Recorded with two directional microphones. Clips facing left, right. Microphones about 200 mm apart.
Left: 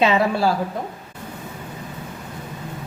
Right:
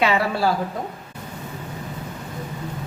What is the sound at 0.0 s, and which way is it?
Speech, 20° left (ahead or behind).